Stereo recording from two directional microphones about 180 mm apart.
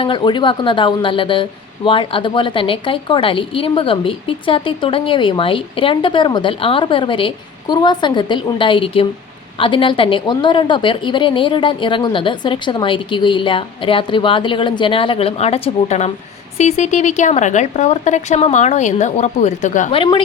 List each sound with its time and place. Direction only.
0.0 s a woman's voice: 30° left (ahead or behind); by 19.9 s 45° left (ahead or behind)
19.9 s speech: 30° left (ahead or behind)